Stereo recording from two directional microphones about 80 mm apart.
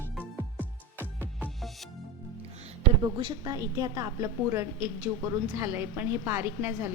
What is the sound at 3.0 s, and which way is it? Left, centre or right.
Speech, right.